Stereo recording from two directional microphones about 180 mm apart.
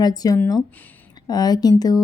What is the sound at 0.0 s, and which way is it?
Speech, 20° left (ahead or behind).